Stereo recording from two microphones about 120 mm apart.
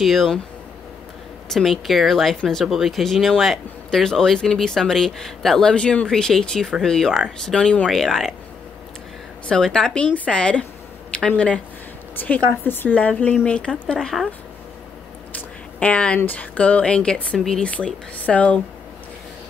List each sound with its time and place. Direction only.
0.0 s speech: centre (ahead or behind)
1.5 s speech: centre (ahead or behind)
9.5 s speech: 5° left (ahead or behind)
15.8 s speech: 10° left (ahead or behind)